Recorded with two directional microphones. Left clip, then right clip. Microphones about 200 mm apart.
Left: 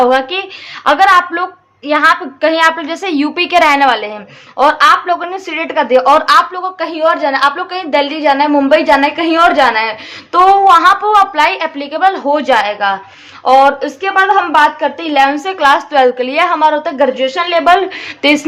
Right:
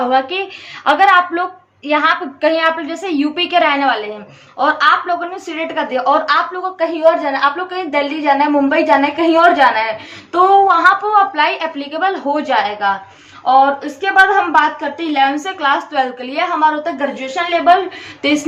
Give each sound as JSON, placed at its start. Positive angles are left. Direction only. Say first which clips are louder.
{"t": 0.1, "sound": "a woman's voice", "louder": "left 3 dB", "side_deg": 35}
{"t": 14.5, "sound": "a woman's voice", "louder": "left 4 dB", "side_deg": 40}